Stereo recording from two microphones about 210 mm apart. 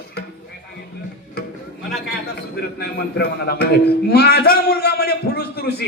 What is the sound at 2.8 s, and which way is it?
A man's voice, 50° left (ahead or behind).